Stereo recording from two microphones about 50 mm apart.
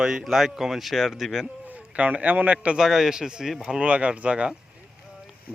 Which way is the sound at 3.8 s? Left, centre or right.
Right.